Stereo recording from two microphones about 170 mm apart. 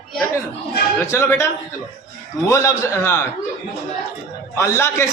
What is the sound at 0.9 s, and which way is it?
A man's voice, 15° left (ahead or behind).